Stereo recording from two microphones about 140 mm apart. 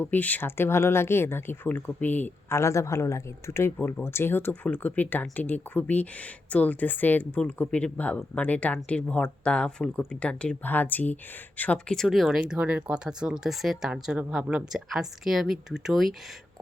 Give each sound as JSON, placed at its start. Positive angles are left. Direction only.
{"t": 0.0, "sound": "speech", "side_deg": 10}